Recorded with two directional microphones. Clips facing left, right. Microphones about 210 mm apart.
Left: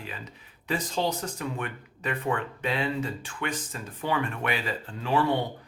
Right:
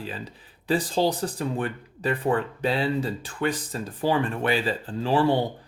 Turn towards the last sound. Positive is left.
turn(degrees=-30)  # may be behind; listen again after turning